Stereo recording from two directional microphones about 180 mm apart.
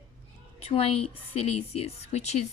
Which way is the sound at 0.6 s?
30° left (ahead or behind).